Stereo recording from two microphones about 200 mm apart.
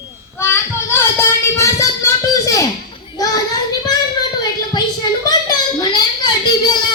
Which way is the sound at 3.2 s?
20° left (ahead or behind).